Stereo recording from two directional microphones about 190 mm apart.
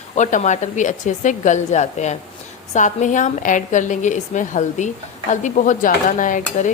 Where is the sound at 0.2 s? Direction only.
40° left (ahead or behind).